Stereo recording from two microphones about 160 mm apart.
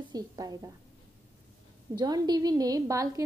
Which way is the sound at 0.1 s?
25° right (ahead or behind).